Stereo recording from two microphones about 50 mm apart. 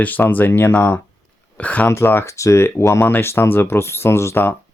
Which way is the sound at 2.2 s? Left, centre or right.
Left.